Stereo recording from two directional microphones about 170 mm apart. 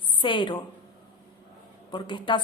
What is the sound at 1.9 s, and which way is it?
Speech, 30° left (ahead or behind).